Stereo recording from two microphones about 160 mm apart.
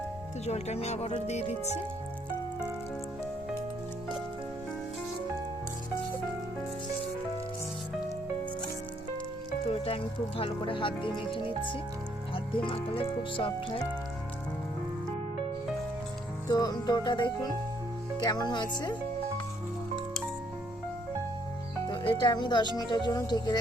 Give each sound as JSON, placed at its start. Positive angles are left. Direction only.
{"t": 0.4, "sound": "speech", "side_deg": 45}
{"t": 9.6, "sound": "speech", "side_deg": 35}
{"t": 16.5, "sound": "speech", "side_deg": 25}
{"t": 21.8, "sound": "speech", "side_deg": 30}